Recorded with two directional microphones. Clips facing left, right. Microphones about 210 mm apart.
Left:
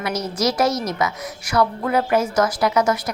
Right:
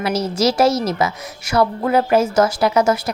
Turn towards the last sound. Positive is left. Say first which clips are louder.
# right 3 dB
turn(degrees=-25)  # may be behind; listen again after turning